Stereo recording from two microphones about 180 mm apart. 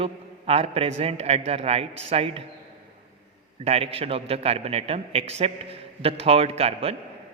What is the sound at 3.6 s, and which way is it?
A man's voice, 35° right (ahead or behind).